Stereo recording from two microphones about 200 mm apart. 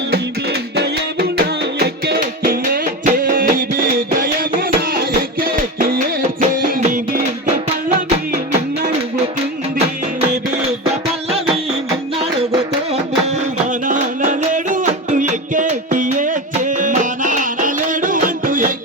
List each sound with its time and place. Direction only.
0.8 s music: 50° right (ahead or behind)
13.8 s music: 40° right (ahead or behind)